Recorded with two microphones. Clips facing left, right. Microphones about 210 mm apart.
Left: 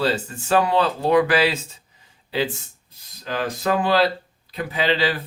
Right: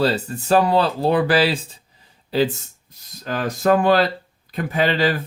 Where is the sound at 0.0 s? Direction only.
40° right (ahead or behind).